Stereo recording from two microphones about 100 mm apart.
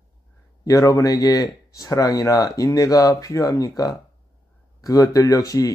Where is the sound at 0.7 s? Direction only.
35° left (ahead or behind).